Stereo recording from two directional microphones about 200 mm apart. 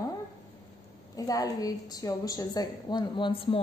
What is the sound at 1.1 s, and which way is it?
A woman's voice, 20° left (ahead or behind).